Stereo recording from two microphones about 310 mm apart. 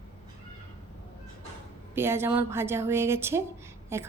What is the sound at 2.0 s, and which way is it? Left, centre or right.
A woman's voice, centre.